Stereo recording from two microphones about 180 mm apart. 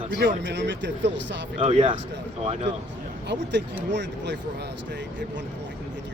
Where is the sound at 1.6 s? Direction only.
40° right (ahead or behind).